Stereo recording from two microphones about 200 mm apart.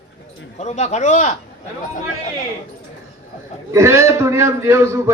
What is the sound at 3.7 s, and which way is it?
A man's voice, 15° right (ahead or behind).